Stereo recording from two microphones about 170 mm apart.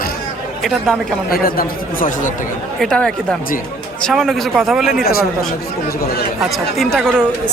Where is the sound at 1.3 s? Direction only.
60° left (ahead or behind).